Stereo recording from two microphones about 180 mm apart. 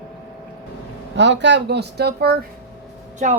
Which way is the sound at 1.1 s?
80° right.